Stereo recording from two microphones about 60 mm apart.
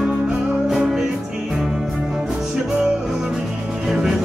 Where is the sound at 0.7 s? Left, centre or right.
Centre.